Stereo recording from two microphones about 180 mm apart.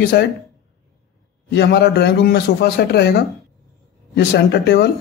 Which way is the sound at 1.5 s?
65° left (ahead or behind).